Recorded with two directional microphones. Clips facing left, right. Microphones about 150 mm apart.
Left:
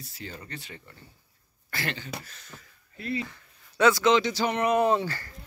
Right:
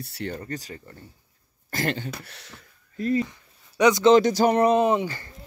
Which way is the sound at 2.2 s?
70° right (ahead or behind).